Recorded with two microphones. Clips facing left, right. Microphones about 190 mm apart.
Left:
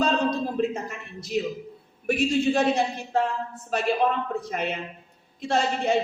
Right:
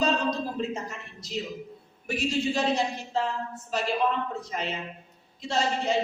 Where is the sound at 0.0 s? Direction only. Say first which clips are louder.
Left 3 dB; 55° left (ahead or behind).